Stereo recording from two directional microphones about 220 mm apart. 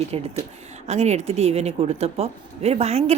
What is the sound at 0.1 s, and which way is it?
Speech, 25° right (ahead or behind).